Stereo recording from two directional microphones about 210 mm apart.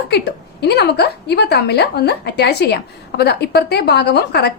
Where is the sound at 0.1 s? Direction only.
50° left (ahead or behind).